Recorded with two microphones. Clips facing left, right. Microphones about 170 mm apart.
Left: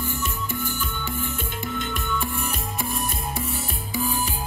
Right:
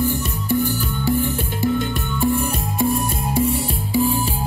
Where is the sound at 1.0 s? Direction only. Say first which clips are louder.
Right 14 dB; 35° right (ahead or behind).